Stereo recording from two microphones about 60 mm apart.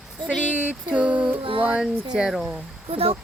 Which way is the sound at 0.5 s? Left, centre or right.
Right.